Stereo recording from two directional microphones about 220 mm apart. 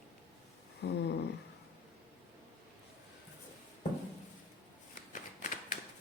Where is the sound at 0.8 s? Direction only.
50° left (ahead or behind).